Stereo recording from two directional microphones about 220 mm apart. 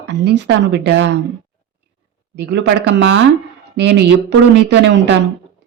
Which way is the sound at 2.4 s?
50° right (ahead or behind).